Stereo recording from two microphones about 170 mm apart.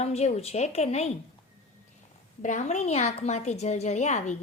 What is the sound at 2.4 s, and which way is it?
A woman's voice, 45° left (ahead or behind).